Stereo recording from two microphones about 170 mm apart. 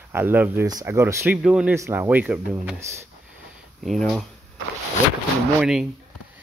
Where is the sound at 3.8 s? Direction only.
Centre (ahead or behind).